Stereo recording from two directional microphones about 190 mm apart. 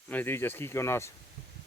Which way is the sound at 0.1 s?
10° left (ahead or behind).